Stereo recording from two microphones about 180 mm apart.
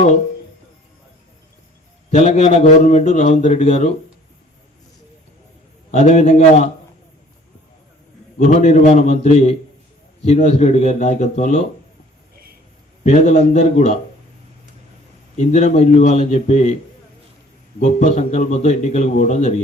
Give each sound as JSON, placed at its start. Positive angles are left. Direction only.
{"t": 2.0, "sound": "a man's voice", "side_deg": 40}
{"t": 5.9, "sound": "a man's voice", "side_deg": 40}
{"t": 8.6, "sound": "a man's voice", "side_deg": 40}
{"t": 13.1, "sound": "a man's voice", "side_deg": 40}
{"t": 15.4, "sound": "a man's voice", "side_deg": 40}
{"t": 17.7, "sound": "a man's voice", "side_deg": 40}